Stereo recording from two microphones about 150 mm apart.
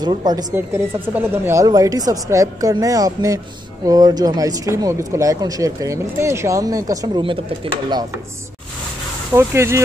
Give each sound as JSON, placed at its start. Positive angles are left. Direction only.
{"t": 0.0, "sound": "speech", "side_deg": -30}
{"t": 0.6, "sound": "speech", "side_deg": -15}
{"t": 7.2, "sound": "speech", "side_deg": -35}
{"t": 9.3, "sound": "speech", "side_deg": -15}